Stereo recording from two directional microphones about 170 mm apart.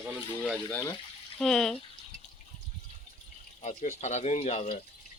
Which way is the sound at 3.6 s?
45° left (ahead or behind).